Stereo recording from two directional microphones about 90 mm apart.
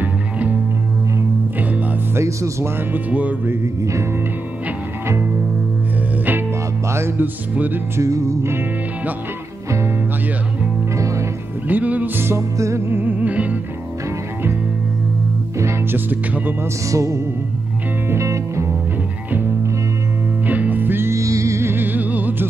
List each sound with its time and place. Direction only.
0.0 s music: 20° right (ahead or behind)
2.1 s music: 35° right (ahead or behind)
2.9 s music: 15° right (ahead or behind)
6.9 s music: 30° right (ahead or behind)
8.0 s music: 35° right (ahead or behind)
11.0 s music: 35° right (ahead or behind)
11.6 s music: 20° right (ahead or behind)
15.6 s speech: 20° right (ahead or behind)
16.9 s music: 35° right (ahead or behind)
20.4 s music: 20° right (ahead or behind)